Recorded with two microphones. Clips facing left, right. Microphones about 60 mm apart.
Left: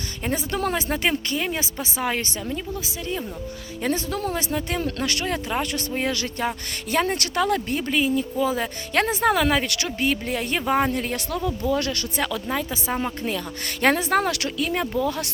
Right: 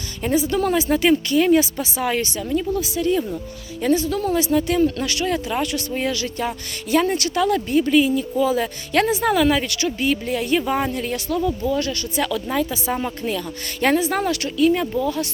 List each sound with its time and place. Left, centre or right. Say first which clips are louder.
0.3 s speech: right 7 dB; left
3.8 s speech: right 6 dB; left
4.8 s speech: right 6 dB; left
9.6 s speech: right 3 dB; left
10.1 s speech: right 5 dB; left
11.7 s speech: right 1 dB; left
12.5 s speech: right 4 dB; left
13.8 s speech: right 1 dB; left
14.3 s speech: right 8 dB; left
14.7 s speech: right 3 dB; left